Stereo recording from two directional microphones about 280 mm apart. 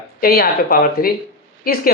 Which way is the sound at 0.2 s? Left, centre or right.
Left.